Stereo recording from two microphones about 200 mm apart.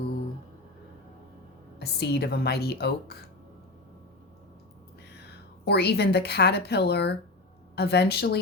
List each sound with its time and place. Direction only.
1.8 s a woman's voice: 55° left (ahead or behind)
5.1 s a woman's voice: 55° left (ahead or behind)